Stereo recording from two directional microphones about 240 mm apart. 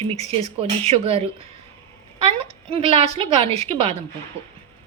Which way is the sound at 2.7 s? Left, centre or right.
Right.